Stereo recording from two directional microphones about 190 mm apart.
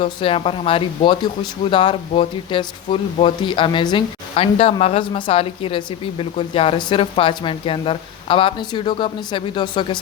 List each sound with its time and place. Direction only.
0.0 s speech: 30° left (ahead or behind)